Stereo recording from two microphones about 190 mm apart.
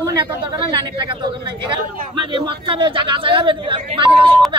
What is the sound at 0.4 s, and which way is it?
Speech, 25° right (ahead or behind).